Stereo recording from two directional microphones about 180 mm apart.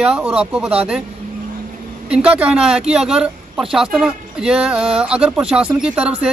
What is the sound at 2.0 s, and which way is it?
Speech, 5° right (ahead or behind).